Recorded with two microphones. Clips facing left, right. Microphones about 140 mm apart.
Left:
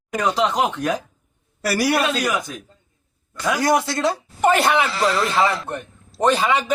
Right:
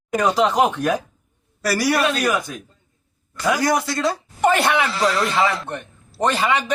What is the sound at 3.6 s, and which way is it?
Speech, 20° left (ahead or behind).